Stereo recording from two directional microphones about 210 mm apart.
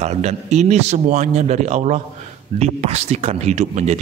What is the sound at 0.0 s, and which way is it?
A woman's voice, 35° right (ahead or behind).